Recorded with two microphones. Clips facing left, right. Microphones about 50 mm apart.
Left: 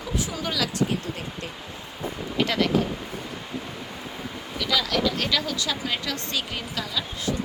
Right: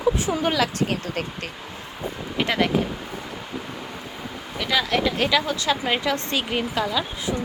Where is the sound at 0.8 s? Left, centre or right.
Right.